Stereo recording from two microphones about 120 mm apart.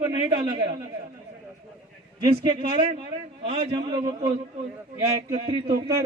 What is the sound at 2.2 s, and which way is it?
A man's voice, 40° right (ahead or behind).